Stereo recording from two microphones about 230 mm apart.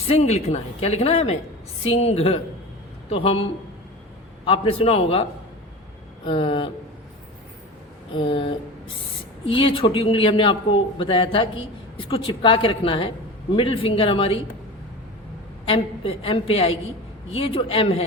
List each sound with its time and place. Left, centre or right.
0.1 s a man's voice: left
4.4 s a man's voice: left
6.2 s a man's voice: left
8.1 s a man's voice: left
15.6 s a man's voice: left